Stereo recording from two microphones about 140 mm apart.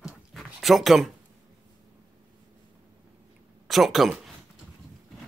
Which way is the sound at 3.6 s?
Centre (ahead or behind).